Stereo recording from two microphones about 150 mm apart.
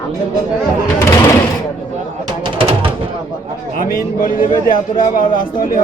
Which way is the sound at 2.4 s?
35° right (ahead or behind).